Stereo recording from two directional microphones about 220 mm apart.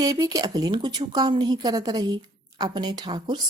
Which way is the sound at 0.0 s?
15° right (ahead or behind).